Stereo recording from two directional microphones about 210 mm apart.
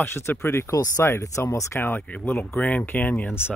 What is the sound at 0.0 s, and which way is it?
Speech, 10° left (ahead or behind).